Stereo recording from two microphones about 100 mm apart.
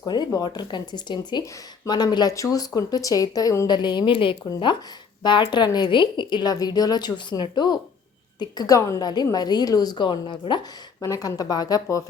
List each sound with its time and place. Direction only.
0.0 s a woman's voice: 40° left (ahead or behind)
3.7 s a woman's voice: 45° left (ahead or behind)
4.4 s a woman's voice: 50° left (ahead or behind)
11.0 s speech: 35° left (ahead or behind)